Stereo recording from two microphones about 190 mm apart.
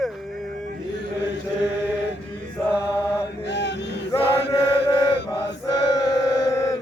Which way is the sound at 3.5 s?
65° left (ahead or behind).